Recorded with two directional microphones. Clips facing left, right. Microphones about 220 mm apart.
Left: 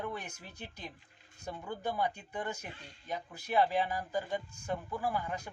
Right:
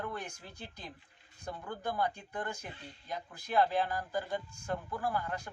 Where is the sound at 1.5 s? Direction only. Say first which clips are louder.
Left 1 dB; 15° left (ahead or behind).